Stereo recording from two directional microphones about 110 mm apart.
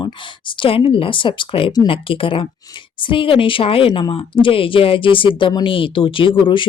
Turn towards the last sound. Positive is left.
turn(degrees=50)  # may be behind; listen again after turning